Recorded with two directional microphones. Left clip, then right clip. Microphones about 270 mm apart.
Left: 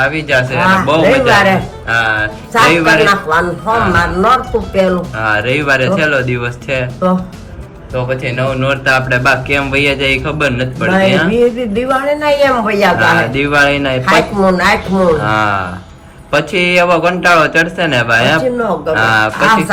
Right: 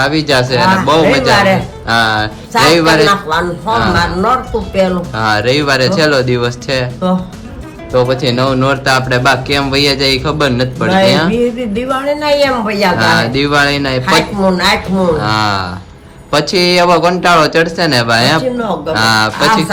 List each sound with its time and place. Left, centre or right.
0.0 s a man's voice: centre